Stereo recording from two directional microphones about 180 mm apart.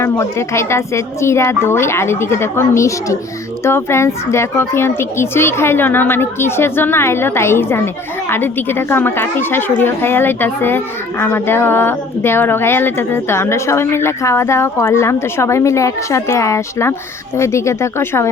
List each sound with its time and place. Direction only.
0.0 s a woman's voice: 15° left (ahead or behind)